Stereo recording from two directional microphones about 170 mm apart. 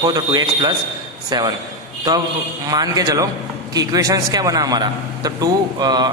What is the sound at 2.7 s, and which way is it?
A man's voice, 20° right (ahead or behind).